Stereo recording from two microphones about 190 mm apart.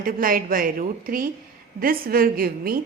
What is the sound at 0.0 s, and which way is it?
A woman's voice, 50° right (ahead or behind).